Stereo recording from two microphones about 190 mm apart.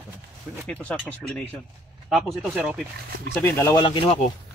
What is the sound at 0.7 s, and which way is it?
Speech, 5° left (ahead or behind).